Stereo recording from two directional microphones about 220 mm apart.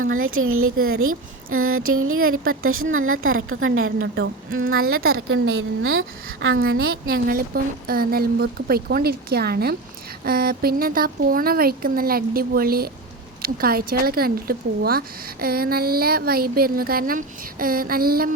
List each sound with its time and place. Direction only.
0.0 s a woman's voice: 70° right (ahead or behind)
6.6 s speech: 45° right (ahead or behind)